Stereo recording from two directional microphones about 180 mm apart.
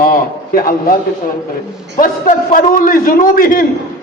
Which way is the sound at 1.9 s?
50° left (ahead or behind).